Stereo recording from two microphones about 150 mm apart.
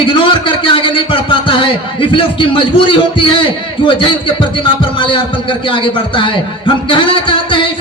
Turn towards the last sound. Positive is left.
turn(degrees=35)  # may be behind; listen again after turning